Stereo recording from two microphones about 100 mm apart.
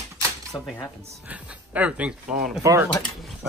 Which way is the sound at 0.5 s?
20° left (ahead or behind).